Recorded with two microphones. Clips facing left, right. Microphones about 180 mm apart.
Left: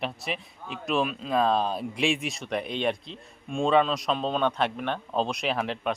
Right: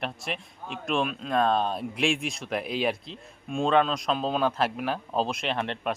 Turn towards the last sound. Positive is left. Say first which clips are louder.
# left 1 dB
turn(degrees=0)  # may be behind; listen again after turning